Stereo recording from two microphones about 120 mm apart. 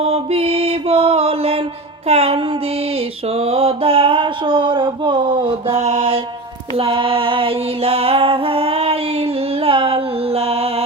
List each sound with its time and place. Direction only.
0.0 s mantra: 55° right (ahead or behind)
2.0 s music: 55° right (ahead or behind)
3.3 s mantra: 55° right (ahead or behind); by 5.7 s 40° right (ahead or behind)
5.7 s music: 60° right (ahead or behind)